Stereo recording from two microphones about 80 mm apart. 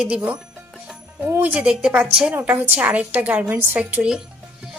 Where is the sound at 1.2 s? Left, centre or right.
Right.